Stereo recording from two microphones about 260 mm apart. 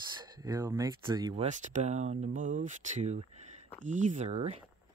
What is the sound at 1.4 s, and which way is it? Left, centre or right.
Speech, right.